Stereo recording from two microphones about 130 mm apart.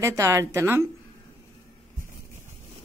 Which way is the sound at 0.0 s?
20° right (ahead or behind).